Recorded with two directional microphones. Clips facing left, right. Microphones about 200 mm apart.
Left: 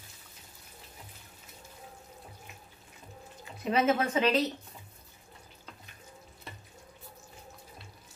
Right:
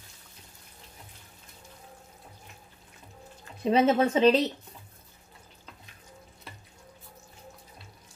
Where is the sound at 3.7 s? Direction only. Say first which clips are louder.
Right 5 dB; 30° right (ahead or behind).